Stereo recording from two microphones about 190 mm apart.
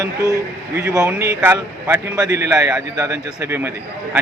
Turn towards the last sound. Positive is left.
turn(degrees=-15)  # may be behind; listen again after turning